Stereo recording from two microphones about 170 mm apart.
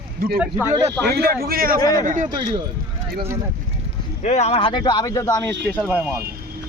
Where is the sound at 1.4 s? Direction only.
60° right (ahead or behind).